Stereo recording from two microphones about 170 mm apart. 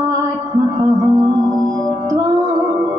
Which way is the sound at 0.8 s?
20° right (ahead or behind).